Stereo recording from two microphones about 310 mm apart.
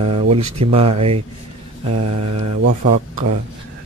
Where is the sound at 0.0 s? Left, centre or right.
Centre.